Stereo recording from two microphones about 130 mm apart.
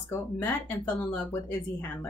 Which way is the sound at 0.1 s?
20° left (ahead or behind).